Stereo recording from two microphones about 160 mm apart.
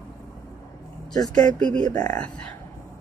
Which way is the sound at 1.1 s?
25° left (ahead or behind).